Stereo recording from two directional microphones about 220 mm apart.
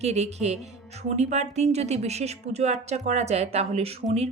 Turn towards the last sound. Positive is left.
turn(degrees=-30)  # may be behind; listen again after turning